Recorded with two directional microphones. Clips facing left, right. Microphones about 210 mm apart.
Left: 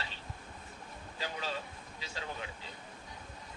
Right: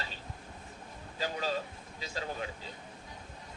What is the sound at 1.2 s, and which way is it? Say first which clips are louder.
Speech: right 5 dB; 40° right (ahead or behind).